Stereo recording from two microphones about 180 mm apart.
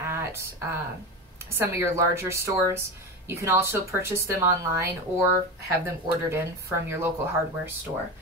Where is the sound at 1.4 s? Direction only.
15° right (ahead or behind).